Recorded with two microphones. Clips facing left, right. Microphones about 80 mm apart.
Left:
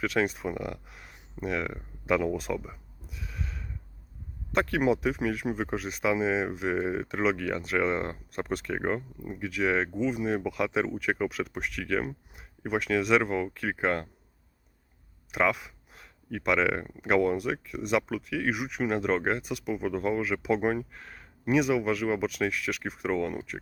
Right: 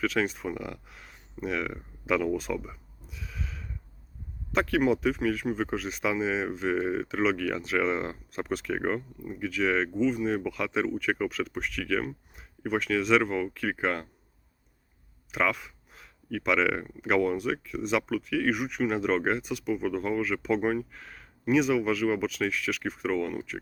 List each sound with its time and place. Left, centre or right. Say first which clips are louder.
0.0 s speech: even; centre
9.0 s speech: right 1 dB; centre
9.4 s speech: even; centre
15.3 s a sound: left 1 dB; centre
16.4 s speech: even; centre